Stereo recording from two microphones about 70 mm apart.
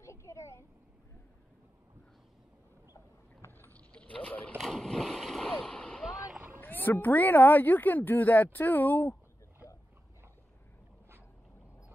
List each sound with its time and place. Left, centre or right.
0.0 s a sound: left
3.4 s rowboat: left
3.7 s vehicle: centre
4.6 s splash: centre
6.0 s rowboat: centre
6.6 s speech: left